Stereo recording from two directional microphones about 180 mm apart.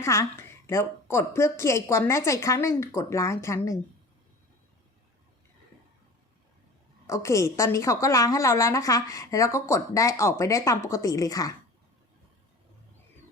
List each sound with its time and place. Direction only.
0.0 s a woman's voice: 15° left (ahead or behind)
7.1 s a woman's voice: 15° left (ahead or behind)